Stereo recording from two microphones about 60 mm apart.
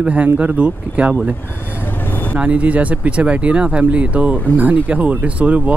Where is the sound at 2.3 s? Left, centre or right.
Right.